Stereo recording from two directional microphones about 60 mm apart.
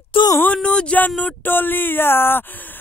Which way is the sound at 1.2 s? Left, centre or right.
Left.